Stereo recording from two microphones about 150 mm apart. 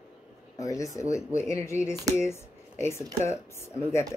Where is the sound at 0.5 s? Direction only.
20° left (ahead or behind).